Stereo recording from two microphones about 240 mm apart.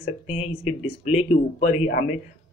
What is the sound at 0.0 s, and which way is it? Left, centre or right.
Speech, left.